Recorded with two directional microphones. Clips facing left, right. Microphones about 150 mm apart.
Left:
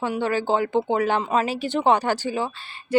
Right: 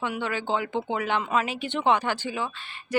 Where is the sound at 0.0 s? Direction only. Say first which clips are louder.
Left 6 dB; 35° left (ahead or behind).